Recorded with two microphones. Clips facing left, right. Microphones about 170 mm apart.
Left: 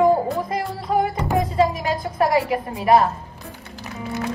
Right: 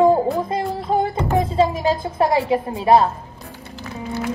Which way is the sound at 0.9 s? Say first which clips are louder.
Even; 30° right (ahead or behind).